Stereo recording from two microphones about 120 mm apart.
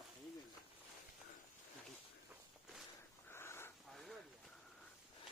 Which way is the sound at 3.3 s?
20° left (ahead or behind).